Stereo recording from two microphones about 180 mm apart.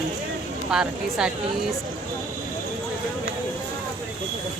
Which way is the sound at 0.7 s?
5° right (ahead or behind).